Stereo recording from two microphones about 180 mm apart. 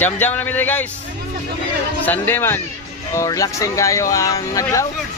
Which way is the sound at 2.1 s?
10° left (ahead or behind).